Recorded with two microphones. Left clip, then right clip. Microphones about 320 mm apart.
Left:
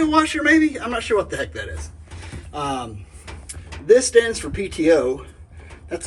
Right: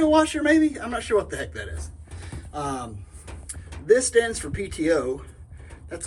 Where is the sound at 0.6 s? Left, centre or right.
Centre.